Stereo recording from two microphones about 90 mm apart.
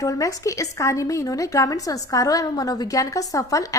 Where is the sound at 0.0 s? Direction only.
40° left (ahead or behind).